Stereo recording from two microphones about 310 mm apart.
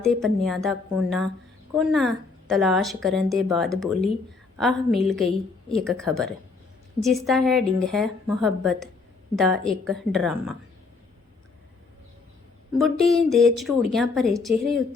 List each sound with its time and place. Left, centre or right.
0.0 s speech: centre
12.8 s speech: centre